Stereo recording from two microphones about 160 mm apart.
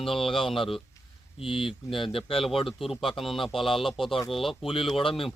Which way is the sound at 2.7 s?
Centre (ahead or behind).